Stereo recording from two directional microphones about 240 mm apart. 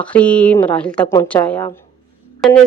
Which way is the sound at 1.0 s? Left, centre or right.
Centre.